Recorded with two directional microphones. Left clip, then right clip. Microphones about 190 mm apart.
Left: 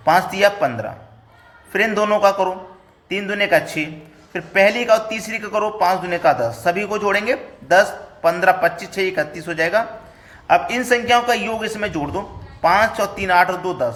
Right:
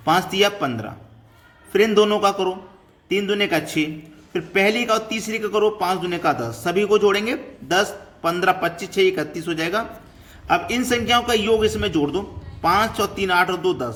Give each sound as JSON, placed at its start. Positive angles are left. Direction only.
{"t": 0.0, "sound": "a man's voice", "side_deg": -20}